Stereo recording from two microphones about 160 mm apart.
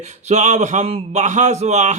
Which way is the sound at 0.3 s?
45° right (ahead or behind).